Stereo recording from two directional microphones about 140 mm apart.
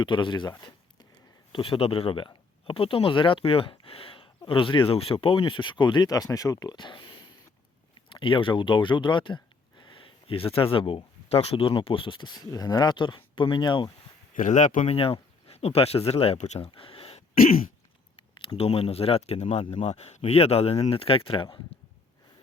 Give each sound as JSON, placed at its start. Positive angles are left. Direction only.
{"t": 0.0, "sound": "speech", "side_deg": 35}
{"t": 1.5, "sound": "speech", "side_deg": 40}
{"t": 8.1, "sound": "a sound", "side_deg": 35}
{"t": 10.5, "sound": "speech", "side_deg": 40}
{"t": 14.3, "sound": "speech", "side_deg": 60}
{"t": 14.9, "sound": "speech", "side_deg": 40}
{"t": 17.3, "sound": "throat clearing", "side_deg": 90}
{"t": 18.2, "sound": "speech", "side_deg": 40}